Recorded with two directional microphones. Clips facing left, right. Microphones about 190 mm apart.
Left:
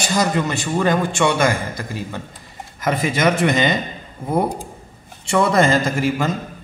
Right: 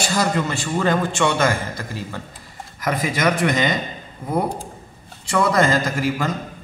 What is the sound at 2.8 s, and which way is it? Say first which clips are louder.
Speech: left 2 dB; 25° left (ahead or behind).